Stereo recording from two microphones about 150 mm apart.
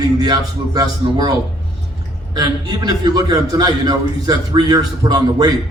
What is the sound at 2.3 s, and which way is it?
A man's voice, 25° right (ahead or behind).